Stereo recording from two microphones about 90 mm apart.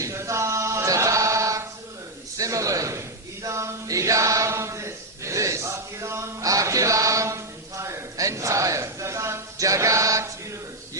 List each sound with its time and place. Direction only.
0.0 s chant: 35° right (ahead or behind)
2.4 s a sound: 40° right (ahead or behind)
3.4 s chant: 35° right (ahead or behind)